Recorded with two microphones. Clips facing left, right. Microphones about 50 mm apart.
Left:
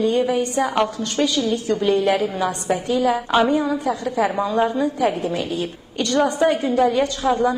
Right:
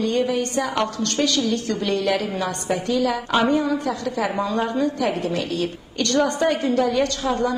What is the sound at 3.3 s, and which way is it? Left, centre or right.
A woman's voice, centre.